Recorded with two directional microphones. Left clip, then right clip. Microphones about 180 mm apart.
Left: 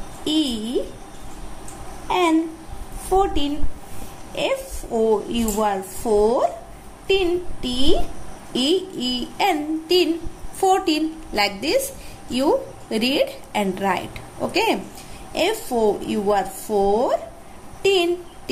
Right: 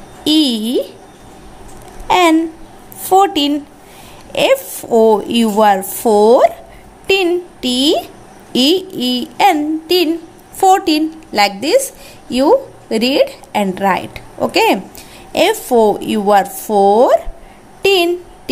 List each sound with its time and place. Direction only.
0.2 s a woman's voice: 40° right (ahead or behind)
2.0 s a sound: 45° right (ahead or behind)
3.1 s a woman's voice: 50° right (ahead or behind)